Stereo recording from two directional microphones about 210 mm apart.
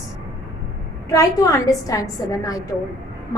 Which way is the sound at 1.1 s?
15° left (ahead or behind).